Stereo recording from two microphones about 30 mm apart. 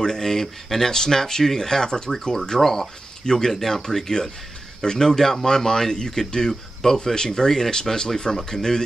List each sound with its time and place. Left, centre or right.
0.0 s speech: centre